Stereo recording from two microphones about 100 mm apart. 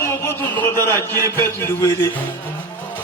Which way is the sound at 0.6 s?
25° left (ahead or behind).